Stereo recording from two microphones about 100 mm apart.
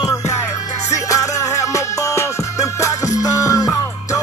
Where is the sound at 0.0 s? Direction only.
30° left (ahead or behind).